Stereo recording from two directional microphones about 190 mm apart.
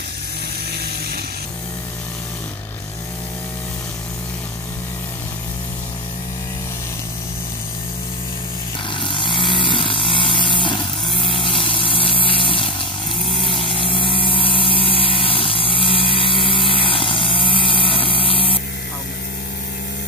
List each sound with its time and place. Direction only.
9.0 s vehicle: 25° left (ahead or behind)